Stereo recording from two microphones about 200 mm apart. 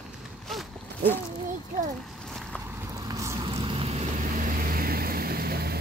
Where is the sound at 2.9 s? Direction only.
15° right (ahead or behind).